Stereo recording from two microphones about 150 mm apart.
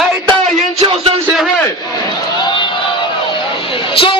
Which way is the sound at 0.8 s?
40° right (ahead or behind).